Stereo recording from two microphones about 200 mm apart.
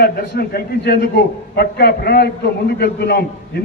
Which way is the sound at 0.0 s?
55° left (ahead or behind).